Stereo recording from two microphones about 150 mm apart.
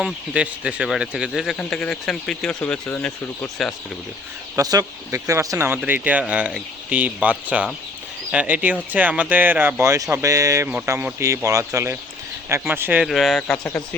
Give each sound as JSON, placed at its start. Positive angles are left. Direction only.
{"t": 0.0, "sound": "speech", "side_deg": -5}
{"t": 4.5, "sound": "speech", "side_deg": -25}
{"t": 13.1, "sound": "speech", "side_deg": 0}